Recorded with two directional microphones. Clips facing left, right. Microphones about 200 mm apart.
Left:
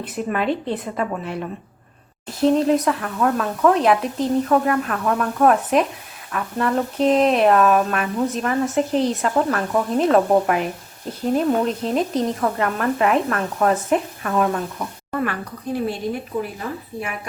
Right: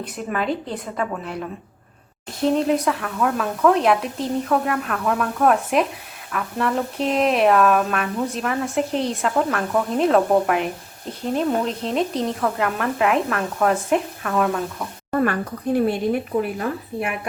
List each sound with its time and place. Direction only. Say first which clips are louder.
0.0 s speech: left 2 dB; centre (ahead or behind)
2.4 s speech: left 2 dB; centre (ahead or behind)
15.1 s speech: right 4 dB; 45° right (ahead or behind)